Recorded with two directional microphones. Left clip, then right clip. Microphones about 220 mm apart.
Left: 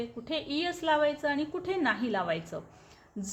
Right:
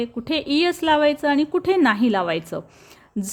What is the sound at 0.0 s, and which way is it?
A woman's voice, 50° right (ahead or behind).